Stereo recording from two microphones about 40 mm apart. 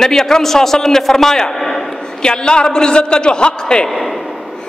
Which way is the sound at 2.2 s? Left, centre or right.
Left.